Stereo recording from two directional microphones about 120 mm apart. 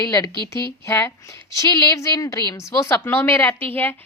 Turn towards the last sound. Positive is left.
turn(degrees=15)  # may be behind; listen again after turning